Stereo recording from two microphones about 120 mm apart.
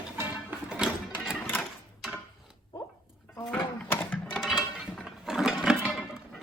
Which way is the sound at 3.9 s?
15° left (ahead or behind).